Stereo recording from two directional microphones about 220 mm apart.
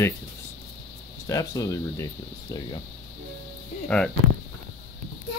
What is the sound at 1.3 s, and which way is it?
Speech, 15° left (ahead or behind).